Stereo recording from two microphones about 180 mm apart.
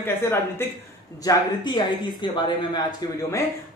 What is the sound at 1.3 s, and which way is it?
Speech, 25° left (ahead or behind).